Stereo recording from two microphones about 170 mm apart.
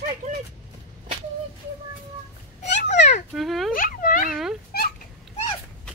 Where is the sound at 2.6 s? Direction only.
45° left (ahead or behind).